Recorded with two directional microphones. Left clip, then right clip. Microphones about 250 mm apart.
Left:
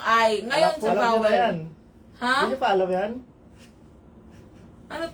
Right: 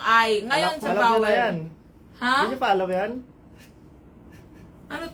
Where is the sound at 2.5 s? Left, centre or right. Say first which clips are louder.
Even; right.